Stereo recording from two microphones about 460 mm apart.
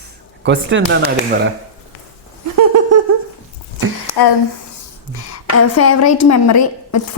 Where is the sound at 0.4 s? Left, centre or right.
Right.